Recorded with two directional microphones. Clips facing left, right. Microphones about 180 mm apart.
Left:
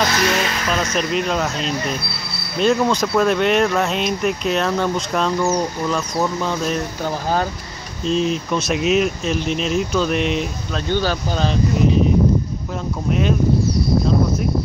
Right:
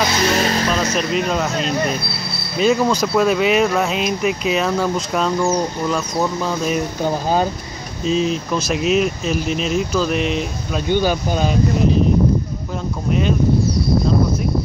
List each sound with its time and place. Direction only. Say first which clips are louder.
0.0 s speech: even; 20° right (ahead or behind)
0.3 s music: right 3 dB; 35° right (ahead or behind)
0.9 s speech: right 1 dB; centre (ahead or behind)
7.0 s speech: right 4 dB; 15° right (ahead or behind)
8.0 s speech: right 1 dB; centre (ahead or behind)
10.9 s speech: right 3 dB; 15° right (ahead or behind)